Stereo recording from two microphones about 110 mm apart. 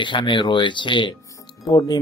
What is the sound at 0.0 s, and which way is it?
Speech, 45° left (ahead or behind).